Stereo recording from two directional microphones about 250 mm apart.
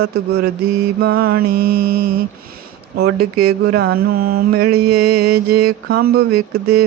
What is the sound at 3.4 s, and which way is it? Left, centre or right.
Mantra, right.